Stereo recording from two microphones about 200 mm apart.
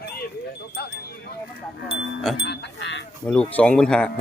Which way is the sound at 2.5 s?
60° left (ahead or behind).